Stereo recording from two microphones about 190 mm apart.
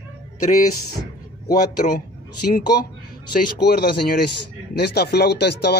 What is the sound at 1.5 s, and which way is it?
Speech, 45° left (ahead or behind).